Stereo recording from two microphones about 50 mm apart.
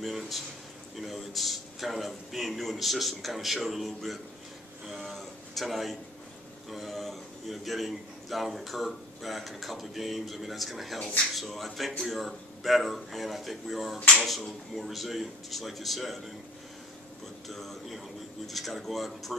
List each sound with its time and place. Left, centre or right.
0.0 s a man's voice: centre
4.8 s a sound: centre
6.7 s a man's voice: centre
17.5 s a man's voice: centre